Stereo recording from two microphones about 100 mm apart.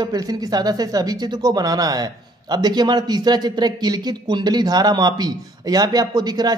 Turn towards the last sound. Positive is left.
turn(degrees=-45)  # may be behind; listen again after turning